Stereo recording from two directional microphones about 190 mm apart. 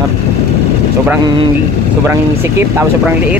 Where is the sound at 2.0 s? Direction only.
10° right (ahead or behind).